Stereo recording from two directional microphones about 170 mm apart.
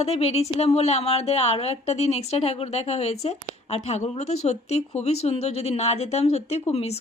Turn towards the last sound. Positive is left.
turn(degrees=35)  # may be behind; listen again after turning